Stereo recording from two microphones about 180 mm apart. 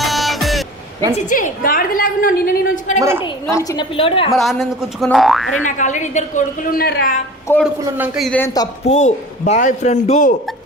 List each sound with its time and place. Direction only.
0.0 s music: centre (ahead or behind)
1.3 s a woman's voice: 45° left (ahead or behind)
3.0 s a woman's voice: 15° right (ahead or behind)
3.5 s a woman's voice: 20° left (ahead or behind)
4.3 s speech: centre (ahead or behind)
5.6 s a woman's voice: 45° left (ahead or behind)
7.5 s a man's voice: 15° left (ahead or behind)
7.9 s speech: 10° right (ahead or behind)
8.8 s a woman's voice: 40° left (ahead or behind)